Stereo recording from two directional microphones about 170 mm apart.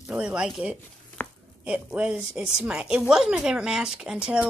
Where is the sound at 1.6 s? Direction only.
5° right (ahead or behind).